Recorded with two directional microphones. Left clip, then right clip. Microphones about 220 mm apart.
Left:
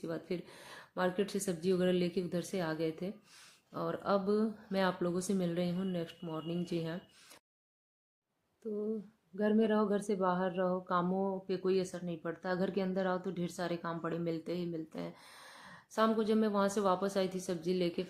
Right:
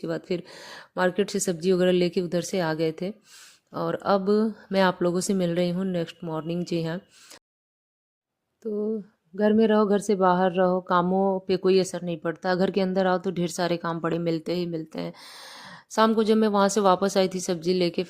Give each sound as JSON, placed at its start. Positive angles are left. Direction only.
{"t": 0.0, "sound": "speech", "side_deg": -45}
{"t": 8.6, "sound": "speech", "side_deg": -45}